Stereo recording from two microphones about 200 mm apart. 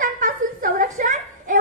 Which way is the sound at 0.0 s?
40° right (ahead or behind).